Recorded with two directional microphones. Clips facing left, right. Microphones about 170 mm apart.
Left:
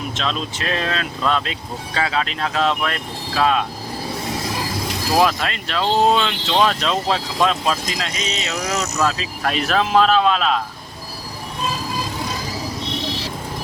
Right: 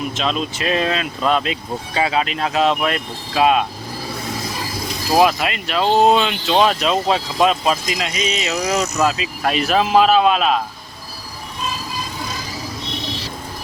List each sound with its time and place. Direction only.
0.2 s speech: 10° right (ahead or behind)
5.1 s speech: 10° right (ahead or behind)